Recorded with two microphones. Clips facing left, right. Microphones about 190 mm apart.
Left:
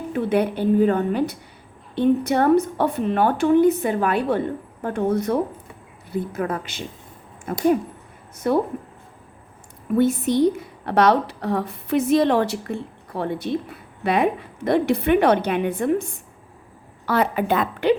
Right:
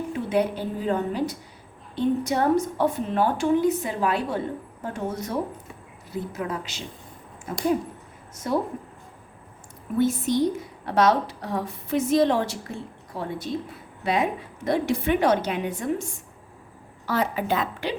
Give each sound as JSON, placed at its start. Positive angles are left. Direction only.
{"t": 0.1, "sound": "a woman's voice", "side_deg": 60}
{"t": 10.0, "sound": "a woman's voice", "side_deg": 60}
{"t": 17.1, "sound": "a woman's voice", "side_deg": 60}